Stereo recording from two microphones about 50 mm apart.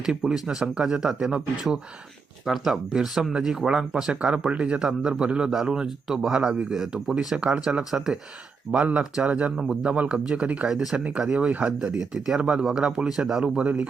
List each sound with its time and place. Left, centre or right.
0.0 s speech: centre
2.5 s speech: centre
7.3 s speech: right
8.7 s speech: right
10.7 s speech: centre
11.9 s speech: centre